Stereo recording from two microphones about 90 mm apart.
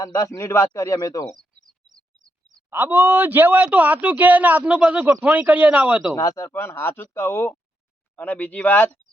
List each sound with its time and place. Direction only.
0.0 s a man's voice: 35° left (ahead or behind)
2.6 s speech: 20° right (ahead or behind)
6.1 s a man's voice: 35° left (ahead or behind); by 9.0 s 20° left (ahead or behind)